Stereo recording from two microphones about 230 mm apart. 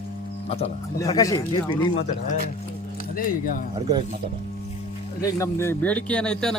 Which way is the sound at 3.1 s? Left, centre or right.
Left.